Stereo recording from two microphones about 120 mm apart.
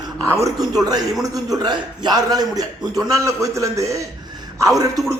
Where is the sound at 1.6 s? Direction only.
35° right (ahead or behind).